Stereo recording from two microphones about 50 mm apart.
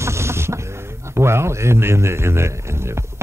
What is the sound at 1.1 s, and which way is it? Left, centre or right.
A man's voice, right.